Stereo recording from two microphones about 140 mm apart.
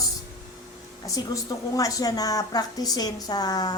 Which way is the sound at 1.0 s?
25° left (ahead or behind).